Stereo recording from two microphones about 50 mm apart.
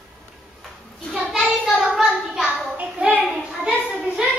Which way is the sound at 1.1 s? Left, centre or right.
Centre.